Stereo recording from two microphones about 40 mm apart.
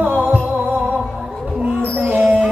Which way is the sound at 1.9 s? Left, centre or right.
Right.